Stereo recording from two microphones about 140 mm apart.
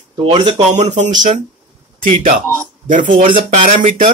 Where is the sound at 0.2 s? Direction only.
30° right (ahead or behind).